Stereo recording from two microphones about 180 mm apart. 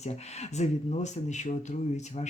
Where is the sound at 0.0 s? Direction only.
35° left (ahead or behind).